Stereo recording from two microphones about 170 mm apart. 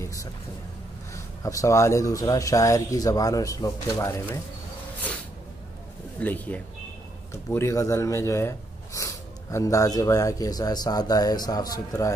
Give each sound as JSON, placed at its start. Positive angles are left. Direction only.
{"t": 0.0, "sound": "a sound", "side_deg": 20}
{"t": 1.1, "sound": "speech", "side_deg": 20}
{"t": 6.1, "sound": "speech", "side_deg": 10}